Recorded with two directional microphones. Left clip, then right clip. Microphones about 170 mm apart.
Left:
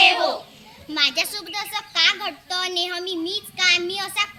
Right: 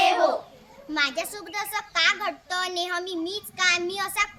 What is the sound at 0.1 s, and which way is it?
Children playing, 5° right (ahead or behind).